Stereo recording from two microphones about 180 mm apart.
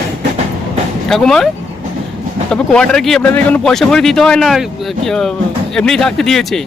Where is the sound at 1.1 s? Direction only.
Centre (ahead or behind).